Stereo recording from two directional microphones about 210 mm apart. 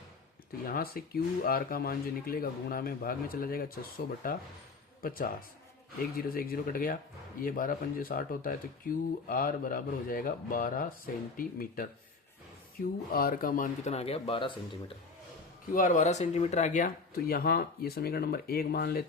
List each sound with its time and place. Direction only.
0.7 s speech: 45° left (ahead or behind)
13.1 s speech: 45° left (ahead or behind); by 14.8 s 25° left (ahead or behind)
15.7 s speech: 40° left (ahead or behind)